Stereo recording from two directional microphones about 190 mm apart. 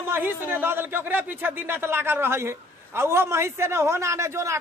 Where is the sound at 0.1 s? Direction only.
10° right (ahead or behind).